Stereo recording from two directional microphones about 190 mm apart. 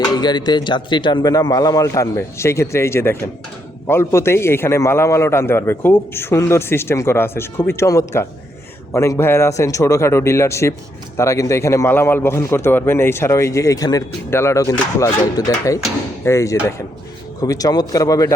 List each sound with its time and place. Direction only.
0.0 s a man's voice: 20° left (ahead or behind)